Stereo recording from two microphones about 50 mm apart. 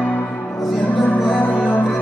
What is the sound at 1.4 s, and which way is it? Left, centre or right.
Music, left.